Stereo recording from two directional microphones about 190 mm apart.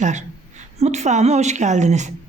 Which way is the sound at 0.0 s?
40° right (ahead or behind).